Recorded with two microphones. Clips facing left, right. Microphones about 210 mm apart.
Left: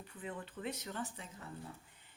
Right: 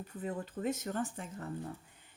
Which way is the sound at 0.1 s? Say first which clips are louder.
Right 6 dB; 40° right (ahead or behind).